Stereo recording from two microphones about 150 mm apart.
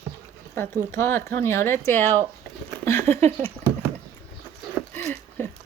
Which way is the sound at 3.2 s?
50° right (ahead or behind).